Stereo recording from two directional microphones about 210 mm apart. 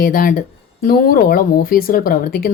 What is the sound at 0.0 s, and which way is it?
A woman's voice, 40° left (ahead or behind).